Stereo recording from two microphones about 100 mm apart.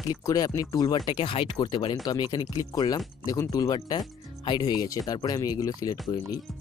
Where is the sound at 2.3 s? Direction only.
40° left (ahead or behind).